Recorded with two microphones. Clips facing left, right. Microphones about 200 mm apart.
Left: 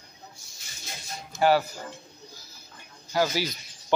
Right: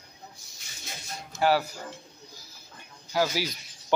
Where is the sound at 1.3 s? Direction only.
5° right (ahead or behind).